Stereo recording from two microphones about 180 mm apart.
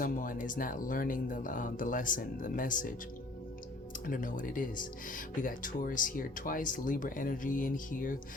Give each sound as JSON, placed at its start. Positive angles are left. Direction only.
{"t": 0.0, "sound": "speech", "side_deg": 50}
{"t": 4.0, "sound": "speech", "side_deg": 50}